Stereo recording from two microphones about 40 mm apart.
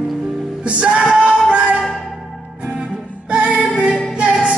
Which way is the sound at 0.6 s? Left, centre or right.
Right.